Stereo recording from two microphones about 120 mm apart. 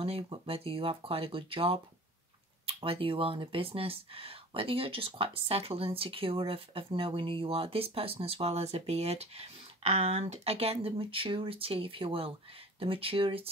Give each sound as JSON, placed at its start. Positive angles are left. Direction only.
{"t": 0.0, "sound": "speech", "side_deg": -55}
{"t": 2.8, "sound": "speech", "side_deg": -45}